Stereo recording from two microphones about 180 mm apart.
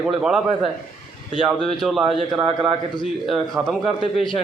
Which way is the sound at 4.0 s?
25° left (ahead or behind).